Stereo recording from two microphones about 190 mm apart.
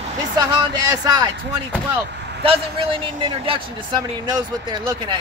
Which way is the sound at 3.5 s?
20° right (ahead or behind).